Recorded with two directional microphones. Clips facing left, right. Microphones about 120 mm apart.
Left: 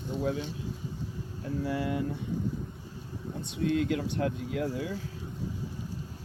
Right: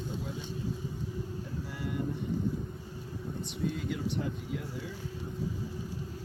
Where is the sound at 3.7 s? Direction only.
90° left.